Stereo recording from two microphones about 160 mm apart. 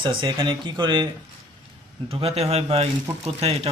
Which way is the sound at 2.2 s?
40° right (ahead or behind).